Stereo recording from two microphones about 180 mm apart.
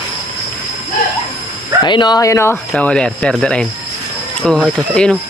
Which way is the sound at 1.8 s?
25° left (ahead or behind).